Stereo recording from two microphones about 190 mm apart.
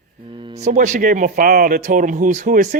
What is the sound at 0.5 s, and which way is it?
Speech, 35° right (ahead or behind).